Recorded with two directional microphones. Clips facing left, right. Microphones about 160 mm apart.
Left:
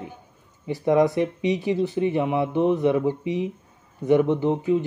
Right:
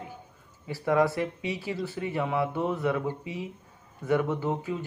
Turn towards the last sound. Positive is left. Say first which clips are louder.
# left 9 dB
turn(degrees=20)  # may be behind; listen again after turning